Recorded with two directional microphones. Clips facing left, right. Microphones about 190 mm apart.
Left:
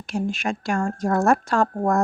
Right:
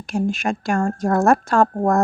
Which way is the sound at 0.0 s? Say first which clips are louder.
Right 4 dB; 45° right (ahead or behind).